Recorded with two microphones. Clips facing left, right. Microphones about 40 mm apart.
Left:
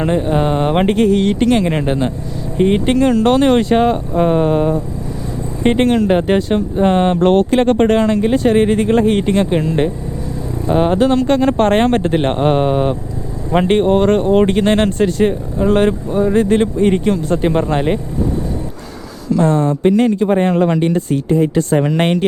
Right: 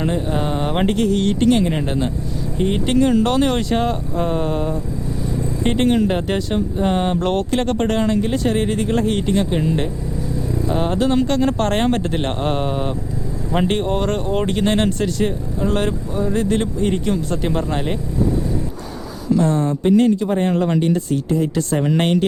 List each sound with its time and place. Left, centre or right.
0.0 s speech: left
1.7 s speech: left
6.1 s speech: left
15.5 s speech: left
19.4 s speech: left
21.8 s speech: left